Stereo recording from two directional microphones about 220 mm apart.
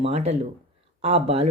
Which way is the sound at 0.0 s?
30° right (ahead or behind).